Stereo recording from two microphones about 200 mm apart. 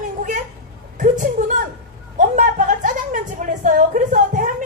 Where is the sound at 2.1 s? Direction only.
40° right (ahead or behind).